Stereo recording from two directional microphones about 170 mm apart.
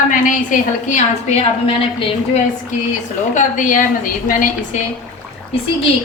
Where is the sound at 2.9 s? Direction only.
45° left (ahead or behind).